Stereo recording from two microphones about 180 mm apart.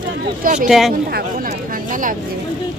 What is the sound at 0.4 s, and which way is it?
Speech, 45° right (ahead or behind).